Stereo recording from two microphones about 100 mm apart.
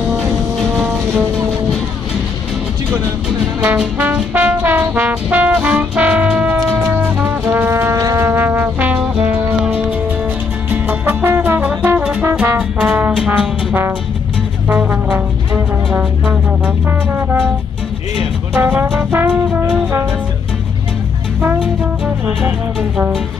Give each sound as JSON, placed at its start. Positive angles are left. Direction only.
{"t": 0.8, "sound": "vehicle", "side_deg": -15}
{"t": 3.6, "sound": "brass instrument", "side_deg": -15}
{"t": 7.0, "sound": "music", "side_deg": -15}
{"t": 7.4, "sound": "music", "side_deg": -25}
{"t": 8.2, "sound": "music", "side_deg": -20}
{"t": 11.8, "sound": "brass instrument", "side_deg": -20}
{"t": 14.7, "sound": "music", "side_deg": -20}
{"t": 18.6, "sound": "brass instrument", "side_deg": -20}
{"t": 22.9, "sound": "speech", "side_deg": -5}